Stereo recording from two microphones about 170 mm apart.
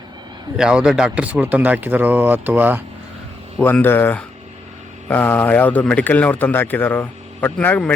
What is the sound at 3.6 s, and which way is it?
A man's voice, 10° left (ahead or behind).